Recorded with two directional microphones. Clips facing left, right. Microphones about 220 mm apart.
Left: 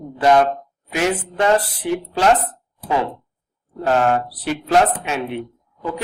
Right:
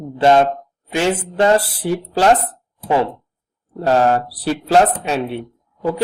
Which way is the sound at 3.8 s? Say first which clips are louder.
Right 2 dB; 35° right (ahead or behind).